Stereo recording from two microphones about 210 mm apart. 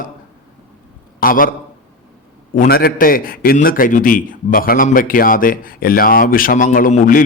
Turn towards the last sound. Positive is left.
turn(degrees=40)  # may be behind; listen again after turning